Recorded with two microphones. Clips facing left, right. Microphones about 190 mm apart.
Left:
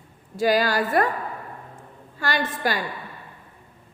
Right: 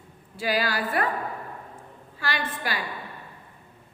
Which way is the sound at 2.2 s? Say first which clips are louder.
Left 5 dB; 45° left (ahead or behind).